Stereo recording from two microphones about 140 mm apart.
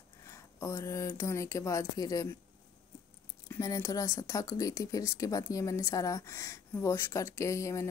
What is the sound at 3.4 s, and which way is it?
Speech, 20° left (ahead or behind).